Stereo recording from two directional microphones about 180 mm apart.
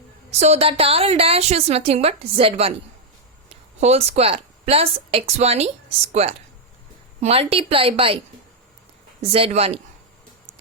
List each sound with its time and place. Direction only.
0.3 s a woman's voice: 35° right (ahead or behind)
3.8 s a woman's voice: 35° right (ahead or behind)
9.2 s a woman's voice: 30° right (ahead or behind)